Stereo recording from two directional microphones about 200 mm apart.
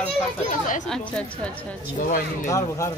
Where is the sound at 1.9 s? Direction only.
40° left (ahead or behind).